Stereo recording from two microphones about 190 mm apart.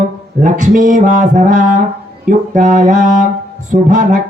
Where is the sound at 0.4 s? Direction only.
40° right (ahead or behind).